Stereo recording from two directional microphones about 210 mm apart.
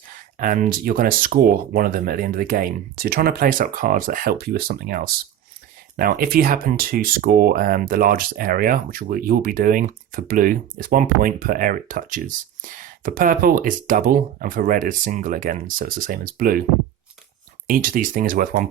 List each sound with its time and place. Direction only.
0.3 s speech: 40° right (ahead or behind)
17.7 s speech: 40° right (ahead or behind)